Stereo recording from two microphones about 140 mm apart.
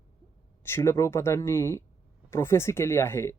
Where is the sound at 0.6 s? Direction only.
20° left (ahead or behind).